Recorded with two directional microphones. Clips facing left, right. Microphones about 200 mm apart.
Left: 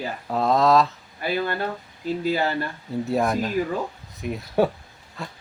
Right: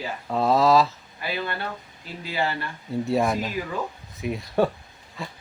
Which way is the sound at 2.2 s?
45° left (ahead or behind).